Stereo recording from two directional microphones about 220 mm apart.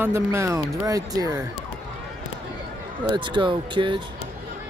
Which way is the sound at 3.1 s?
20° right (ahead or behind).